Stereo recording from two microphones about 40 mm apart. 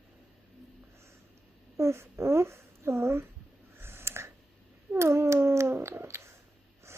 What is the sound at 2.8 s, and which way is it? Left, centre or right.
Speech, right.